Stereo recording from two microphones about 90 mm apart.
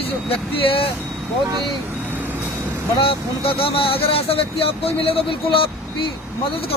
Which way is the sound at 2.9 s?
90° left.